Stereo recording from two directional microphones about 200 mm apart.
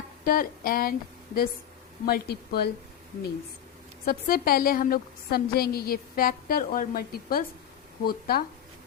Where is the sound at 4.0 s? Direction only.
45° left (ahead or behind).